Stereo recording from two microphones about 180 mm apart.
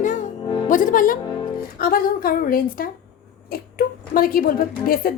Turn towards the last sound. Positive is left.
turn(degrees=55)  # may be behind; listen again after turning